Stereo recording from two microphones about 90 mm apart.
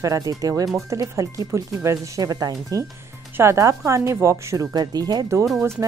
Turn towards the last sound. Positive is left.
turn(degrees=-25)  # may be behind; listen again after turning